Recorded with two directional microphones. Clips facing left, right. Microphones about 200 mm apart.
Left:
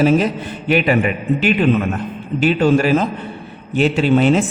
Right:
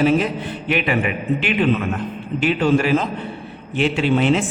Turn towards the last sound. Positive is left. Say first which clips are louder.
# left 4 dB
turn(degrees=40)  # may be behind; listen again after turning